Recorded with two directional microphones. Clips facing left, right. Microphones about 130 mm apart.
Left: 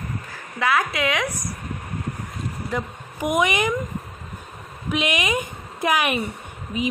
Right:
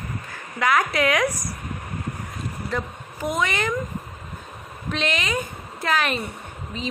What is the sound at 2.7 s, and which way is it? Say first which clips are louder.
A woman's voice: even; 15° left (ahead or behind).